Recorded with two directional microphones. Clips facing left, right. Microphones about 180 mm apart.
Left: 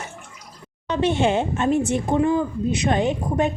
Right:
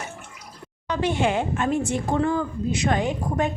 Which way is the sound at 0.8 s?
25° left (ahead or behind).